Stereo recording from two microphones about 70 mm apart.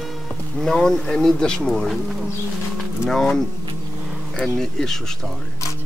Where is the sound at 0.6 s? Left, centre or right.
Centre.